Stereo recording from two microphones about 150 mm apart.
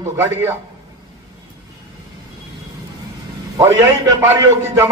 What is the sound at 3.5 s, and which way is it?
Speech, 25° right (ahead or behind).